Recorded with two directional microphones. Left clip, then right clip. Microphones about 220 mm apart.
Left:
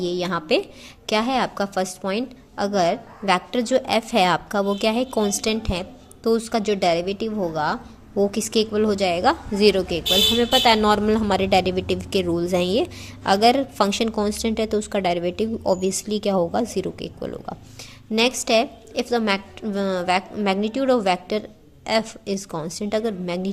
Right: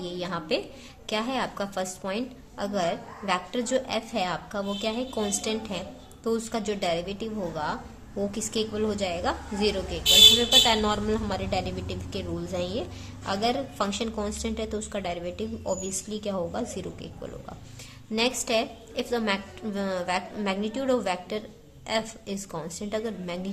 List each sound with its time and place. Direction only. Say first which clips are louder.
0.0 s a woman's voice: left 8 dB; 30° left (ahead or behind)